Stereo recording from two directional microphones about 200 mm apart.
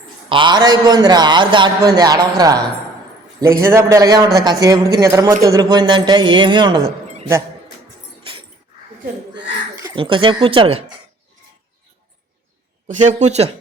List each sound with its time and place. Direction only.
0.3 s a man's voice: 25° right (ahead or behind)
3.6 s a man's voice: 15° right (ahead or behind)
9.3 s speech: 20° right (ahead or behind)
12.9 s a man's voice: 35° right (ahead or behind)